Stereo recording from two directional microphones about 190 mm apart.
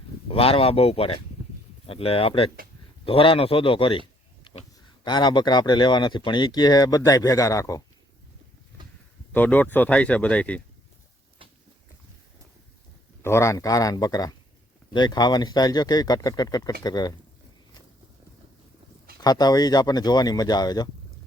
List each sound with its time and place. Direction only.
0.3 s speech: 30° left (ahead or behind)
4.5 s a sound: 25° left (ahead or behind)
5.0 s speech: 25° left (ahead or behind)
9.3 s speech: 10° left (ahead or behind)
13.2 s speech: 15° left (ahead or behind)
19.2 s speech: 20° left (ahead or behind)